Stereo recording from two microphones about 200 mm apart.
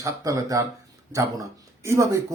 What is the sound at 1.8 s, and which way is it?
Speech, 15° right (ahead or behind).